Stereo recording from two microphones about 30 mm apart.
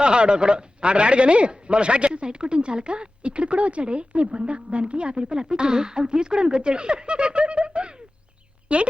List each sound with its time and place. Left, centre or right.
0.0 s a man's voice: right